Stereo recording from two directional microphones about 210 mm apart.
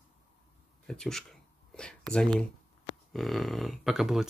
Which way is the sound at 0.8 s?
5° left (ahead or behind).